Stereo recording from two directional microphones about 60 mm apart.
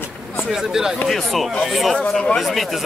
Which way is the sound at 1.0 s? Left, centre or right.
Centre.